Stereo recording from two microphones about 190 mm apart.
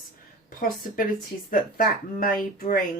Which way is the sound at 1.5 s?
45° left (ahead or behind).